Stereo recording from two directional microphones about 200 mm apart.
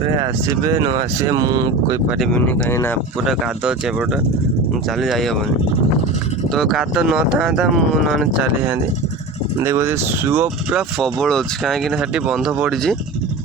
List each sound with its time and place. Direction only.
0.5 s speech: 15° right (ahead or behind)
2.0 s speech: centre (ahead or behind)
2.4 s speech: 10° left (ahead or behind)
3.2 s speech: centre (ahead or behind)
6.5 s speech: centre (ahead or behind)